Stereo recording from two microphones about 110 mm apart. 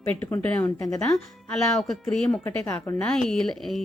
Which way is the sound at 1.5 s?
5° left (ahead or behind).